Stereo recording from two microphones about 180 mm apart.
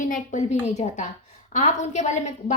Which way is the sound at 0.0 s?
45° left (ahead or behind).